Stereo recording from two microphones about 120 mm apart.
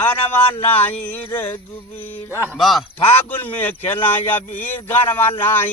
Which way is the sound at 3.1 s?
15° left (ahead or behind).